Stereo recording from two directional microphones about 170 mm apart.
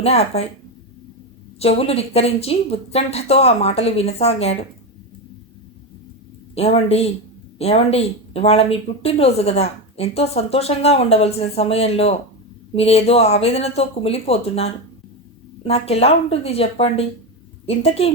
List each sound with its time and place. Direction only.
0.0 s speech: 35° left (ahead or behind)
1.5 s speech: 35° left (ahead or behind)
6.5 s speech: 35° left (ahead or behind)